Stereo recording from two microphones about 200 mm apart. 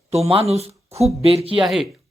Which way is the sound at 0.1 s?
30° right (ahead or behind).